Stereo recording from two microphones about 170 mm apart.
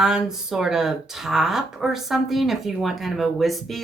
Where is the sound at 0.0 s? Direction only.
5° right (ahead or behind).